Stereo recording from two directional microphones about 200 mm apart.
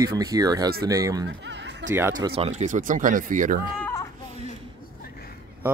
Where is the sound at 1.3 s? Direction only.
60° right (ahead or behind).